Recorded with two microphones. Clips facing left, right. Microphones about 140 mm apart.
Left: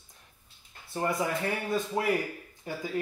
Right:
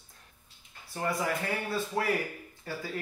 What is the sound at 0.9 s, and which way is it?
Speech, 20° left (ahead or behind).